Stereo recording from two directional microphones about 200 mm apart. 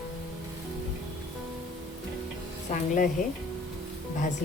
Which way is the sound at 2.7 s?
35° left (ahead or behind).